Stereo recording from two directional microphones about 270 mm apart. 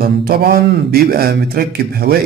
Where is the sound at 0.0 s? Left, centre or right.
Right.